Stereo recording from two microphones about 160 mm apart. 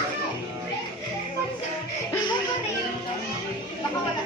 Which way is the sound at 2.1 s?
25° left (ahead or behind).